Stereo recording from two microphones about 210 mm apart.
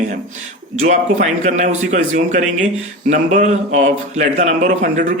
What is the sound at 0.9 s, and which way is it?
Speech, 35° right (ahead or behind).